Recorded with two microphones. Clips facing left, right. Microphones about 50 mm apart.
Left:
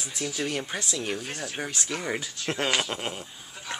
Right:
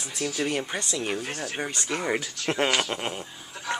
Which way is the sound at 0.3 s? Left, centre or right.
Centre.